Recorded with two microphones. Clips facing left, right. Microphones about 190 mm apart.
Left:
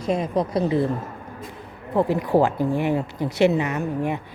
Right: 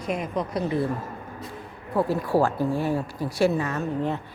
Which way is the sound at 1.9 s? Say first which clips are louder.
Left 3 dB; 20° left (ahead or behind).